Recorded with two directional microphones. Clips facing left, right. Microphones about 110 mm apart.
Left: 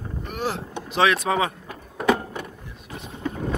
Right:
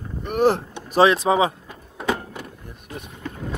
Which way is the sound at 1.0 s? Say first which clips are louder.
Right 4 dB; 30° right (ahead or behind).